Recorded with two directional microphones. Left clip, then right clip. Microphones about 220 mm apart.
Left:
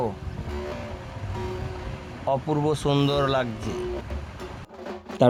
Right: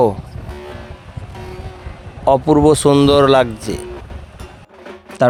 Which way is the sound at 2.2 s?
35° right (ahead or behind).